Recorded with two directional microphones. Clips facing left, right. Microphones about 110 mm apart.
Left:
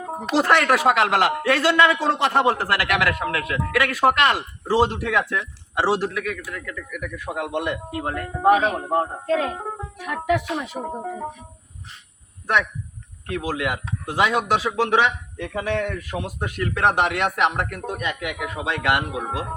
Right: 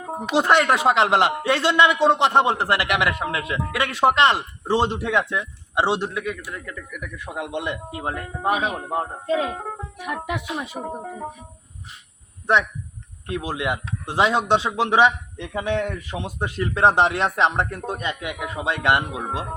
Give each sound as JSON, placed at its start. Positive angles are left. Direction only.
{"t": 0.3, "sound": "speech", "side_deg": -20}
{"t": 9.2, "sound": "speech", "side_deg": -10}
{"t": 9.6, "sound": "speech", "side_deg": 5}
{"t": 10.0, "sound": "speech", "side_deg": -15}
{"t": 13.2, "sound": "speech", "side_deg": -25}